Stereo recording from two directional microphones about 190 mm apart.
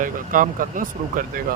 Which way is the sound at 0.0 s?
45° right (ahead or behind).